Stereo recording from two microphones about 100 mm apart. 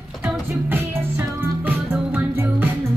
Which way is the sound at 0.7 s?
20° right (ahead or behind).